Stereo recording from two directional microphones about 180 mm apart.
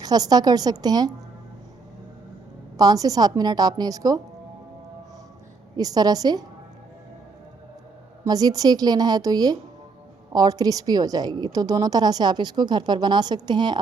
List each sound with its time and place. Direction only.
0.0 s a woman's voice: 20° right (ahead or behind)
2.7 s a woman's voice: 20° right (ahead or behind)
5.7 s a woman's voice: 20° right (ahead or behind)
8.2 s a woman's voice: 20° right (ahead or behind)